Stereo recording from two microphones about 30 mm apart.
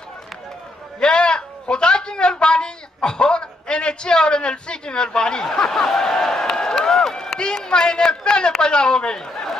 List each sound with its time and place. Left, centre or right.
0.9 s a man's voice: left
5.4 s a man's voice: centre